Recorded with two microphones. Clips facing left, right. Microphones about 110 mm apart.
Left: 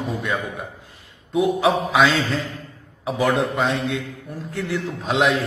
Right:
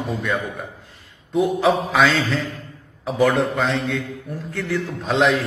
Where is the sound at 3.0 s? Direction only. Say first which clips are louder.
Right 2 dB; centre (ahead or behind).